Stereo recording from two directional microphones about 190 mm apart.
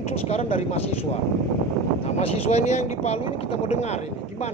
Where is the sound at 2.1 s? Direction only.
35° left (ahead or behind).